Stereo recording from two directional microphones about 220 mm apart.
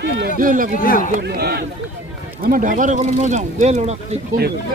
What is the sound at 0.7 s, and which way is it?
Speech, 40° left (ahead or behind).